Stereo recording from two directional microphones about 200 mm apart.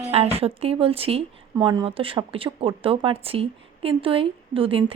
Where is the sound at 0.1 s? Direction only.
30° right (ahead or behind).